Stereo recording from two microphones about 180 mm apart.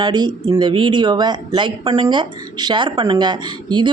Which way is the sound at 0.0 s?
25° right (ahead or behind).